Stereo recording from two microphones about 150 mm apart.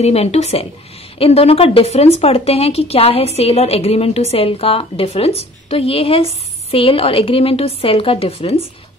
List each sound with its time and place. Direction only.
0.0 s speech: 45° left (ahead or behind)